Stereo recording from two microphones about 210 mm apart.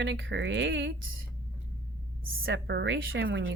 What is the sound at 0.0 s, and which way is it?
Speech, 60° right (ahead or behind).